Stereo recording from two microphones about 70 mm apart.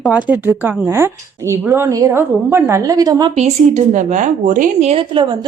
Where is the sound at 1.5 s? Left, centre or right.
Right.